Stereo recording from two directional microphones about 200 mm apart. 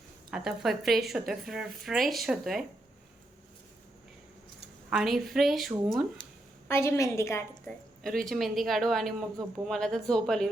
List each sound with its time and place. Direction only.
0.3 s speech: 5° right (ahead or behind)
4.9 s speech: centre (ahead or behind)
6.2 s a sound: 25° left (ahead or behind)
6.7 s a woman's voice: 15° left (ahead or behind)
8.0 s speech: centre (ahead or behind)